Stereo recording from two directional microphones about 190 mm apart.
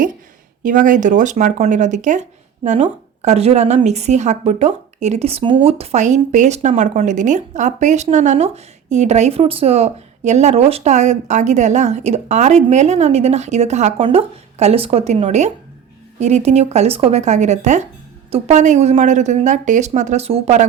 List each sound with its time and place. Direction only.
0.6 s a woman's voice: 45° right (ahead or behind)